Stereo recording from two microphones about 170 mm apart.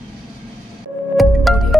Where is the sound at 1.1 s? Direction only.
Centre (ahead or behind).